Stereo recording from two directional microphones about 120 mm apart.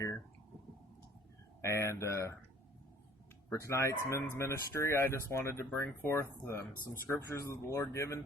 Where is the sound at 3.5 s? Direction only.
25° left (ahead or behind).